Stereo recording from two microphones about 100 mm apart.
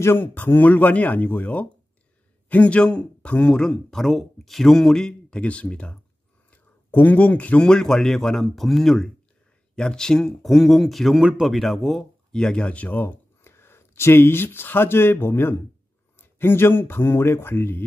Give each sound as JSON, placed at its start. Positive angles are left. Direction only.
{"t": 0.0, "sound": "a man's voice", "side_deg": 20}